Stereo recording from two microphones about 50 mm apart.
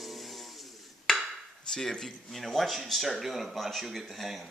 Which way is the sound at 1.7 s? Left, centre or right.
Centre.